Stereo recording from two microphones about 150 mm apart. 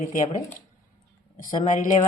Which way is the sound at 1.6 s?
55° left (ahead or behind).